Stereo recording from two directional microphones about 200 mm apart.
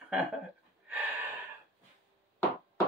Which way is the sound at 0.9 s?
10° right (ahead or behind).